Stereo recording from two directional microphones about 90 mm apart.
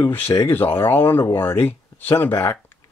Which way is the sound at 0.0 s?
25° left (ahead or behind).